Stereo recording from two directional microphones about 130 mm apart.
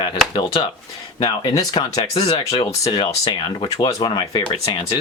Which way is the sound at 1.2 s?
35° left (ahead or behind).